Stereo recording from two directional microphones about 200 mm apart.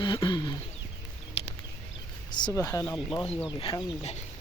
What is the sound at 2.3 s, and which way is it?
Speech, 20° left (ahead or behind).